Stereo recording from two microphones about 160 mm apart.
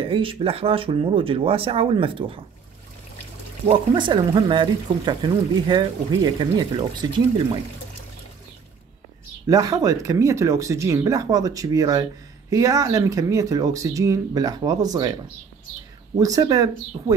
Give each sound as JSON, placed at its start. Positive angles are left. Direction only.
{"t": 0.0, "sound": "speech", "side_deg": -35}
{"t": 3.7, "sound": "speech", "side_deg": -30}
{"t": 9.5, "sound": "speech", "side_deg": -20}
{"t": 16.2, "sound": "speech", "side_deg": -20}